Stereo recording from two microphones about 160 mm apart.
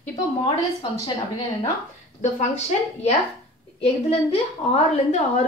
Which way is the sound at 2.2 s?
45° left (ahead or behind).